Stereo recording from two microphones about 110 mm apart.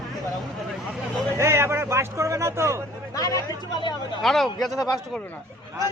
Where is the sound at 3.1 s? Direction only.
30° left (ahead or behind).